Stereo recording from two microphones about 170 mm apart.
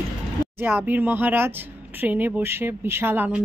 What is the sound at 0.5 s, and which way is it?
Speech, 10° right (ahead or behind).